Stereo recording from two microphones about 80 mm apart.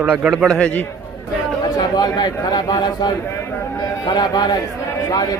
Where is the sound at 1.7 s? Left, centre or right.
Left.